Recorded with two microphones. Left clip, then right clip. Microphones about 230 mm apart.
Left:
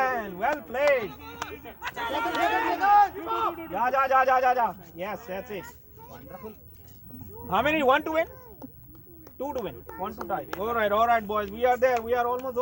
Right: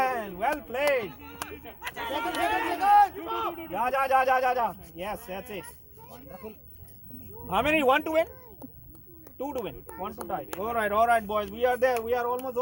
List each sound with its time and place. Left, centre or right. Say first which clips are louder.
0.0 s a sound: left 1 dB; right
1.1 s speech: left 3 dB; left
1.9 s speech: left 2 dB; centre
2.6 s speech: right 1 dB; right
3.2 s a man's voice: left 3 dB; centre
3.5 s speech: left 2 dB; right
9.4 s speech: left 1 dB; right
10.2 s speech: left 3 dB; right
10.6 s speech: left 1 dB; right